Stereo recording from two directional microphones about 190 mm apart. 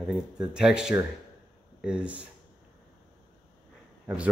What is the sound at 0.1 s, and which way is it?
Speech, 5° right (ahead or behind).